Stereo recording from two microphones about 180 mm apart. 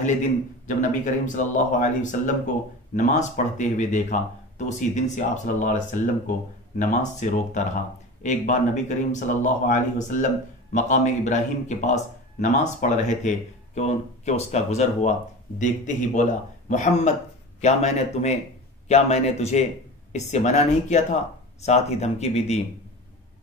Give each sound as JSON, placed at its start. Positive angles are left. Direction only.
{"t": 0.7, "sound": "speech", "side_deg": 45}